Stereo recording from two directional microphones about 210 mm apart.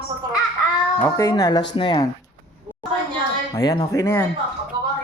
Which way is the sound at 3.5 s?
20° left (ahead or behind).